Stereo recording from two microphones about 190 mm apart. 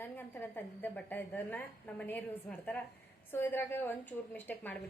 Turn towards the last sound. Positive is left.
turn(degrees=10)  # may be behind; listen again after turning